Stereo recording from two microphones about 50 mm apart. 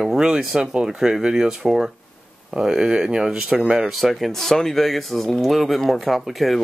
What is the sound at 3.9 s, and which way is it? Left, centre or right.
Speech, centre.